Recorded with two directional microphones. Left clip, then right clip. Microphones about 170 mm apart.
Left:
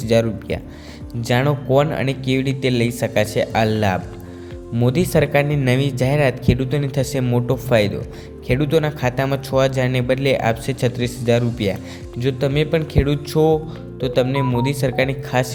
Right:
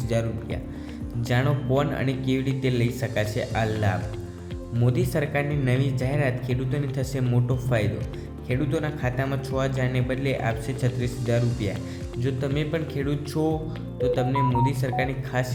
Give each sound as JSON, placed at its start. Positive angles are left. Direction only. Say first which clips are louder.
{"t": 0.0, "sound": "speech", "louder": "left 10 dB", "side_deg": 50}